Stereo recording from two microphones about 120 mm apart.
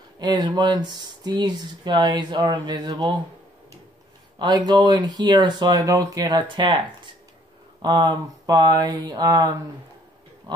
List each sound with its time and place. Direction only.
0.2 s speech: 35° right (ahead or behind)
4.4 s speech: 35° right (ahead or behind)
7.8 s speech: 35° right (ahead or behind)